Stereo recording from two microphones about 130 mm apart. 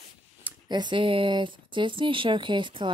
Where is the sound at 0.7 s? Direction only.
35° right (ahead or behind).